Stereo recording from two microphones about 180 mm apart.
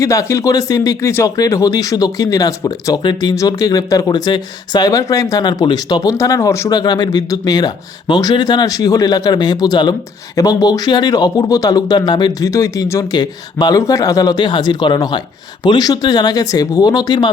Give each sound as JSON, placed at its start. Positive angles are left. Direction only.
{"t": 0.0, "sound": "speech", "side_deg": 20}